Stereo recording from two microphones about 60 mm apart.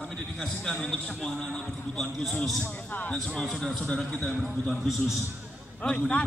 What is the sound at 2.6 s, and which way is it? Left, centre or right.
Speech, left.